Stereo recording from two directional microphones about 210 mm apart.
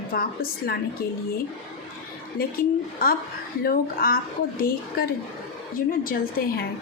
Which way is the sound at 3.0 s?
45° left (ahead or behind).